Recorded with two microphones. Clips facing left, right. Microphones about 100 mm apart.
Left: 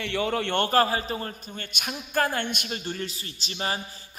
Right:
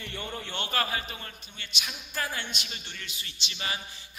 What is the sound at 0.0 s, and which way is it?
Speech, 90° left.